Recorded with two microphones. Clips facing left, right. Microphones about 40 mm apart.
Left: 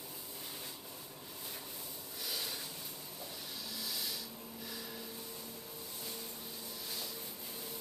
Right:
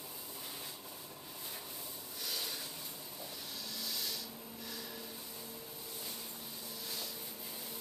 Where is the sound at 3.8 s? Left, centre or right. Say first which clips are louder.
Even; centre.